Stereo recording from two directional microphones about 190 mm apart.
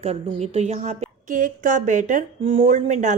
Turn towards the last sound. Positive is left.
turn(degrees=-40)  # may be behind; listen again after turning